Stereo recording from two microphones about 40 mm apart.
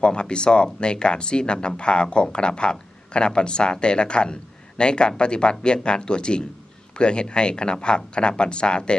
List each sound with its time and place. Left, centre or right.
0.0 s speech: left